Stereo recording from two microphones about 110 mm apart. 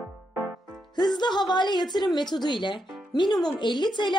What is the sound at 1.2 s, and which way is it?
Speech, 40° left (ahead or behind).